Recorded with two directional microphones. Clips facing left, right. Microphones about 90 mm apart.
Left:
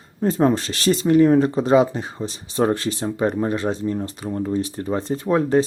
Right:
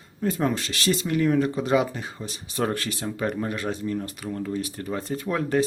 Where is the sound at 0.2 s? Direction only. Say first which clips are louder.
Left 7 dB; 30° left (ahead or behind).